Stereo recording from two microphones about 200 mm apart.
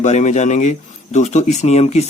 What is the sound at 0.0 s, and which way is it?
Speech, 35° left (ahead or behind).